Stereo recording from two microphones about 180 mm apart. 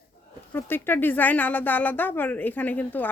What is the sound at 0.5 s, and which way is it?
A woman's voice, 10° left (ahead or behind).